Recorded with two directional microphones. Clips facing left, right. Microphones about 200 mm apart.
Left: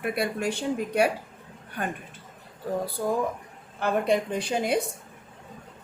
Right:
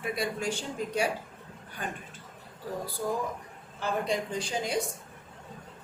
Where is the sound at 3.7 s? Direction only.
60° left (ahead or behind).